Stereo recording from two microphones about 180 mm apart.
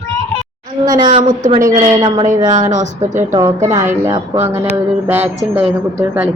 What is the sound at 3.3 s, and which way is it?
Speech, 15° right (ahead or behind).